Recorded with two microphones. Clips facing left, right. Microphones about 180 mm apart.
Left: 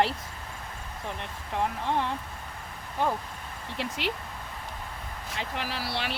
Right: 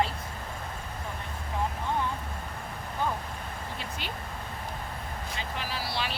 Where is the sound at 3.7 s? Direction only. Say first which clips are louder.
Left 10 dB; 80° left.